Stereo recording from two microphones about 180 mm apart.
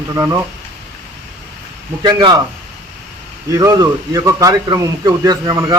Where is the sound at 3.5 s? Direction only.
20° right (ahead or behind).